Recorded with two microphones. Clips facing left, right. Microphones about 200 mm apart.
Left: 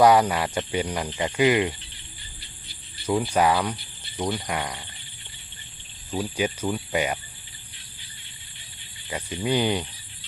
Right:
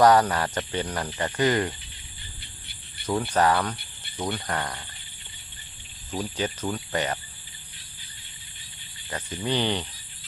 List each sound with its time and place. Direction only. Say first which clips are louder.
0.0 s speech: left 1 dB; 10° left (ahead or behind)
3.1 s speech: left 1 dB; 10° left (ahead or behind)
6.1 s speech: left 3 dB; 10° left (ahead or behind)
9.0 s speech: left 3 dB; 10° left (ahead or behind)